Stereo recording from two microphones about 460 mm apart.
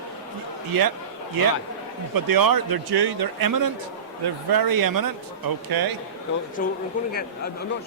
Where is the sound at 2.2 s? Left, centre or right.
Right.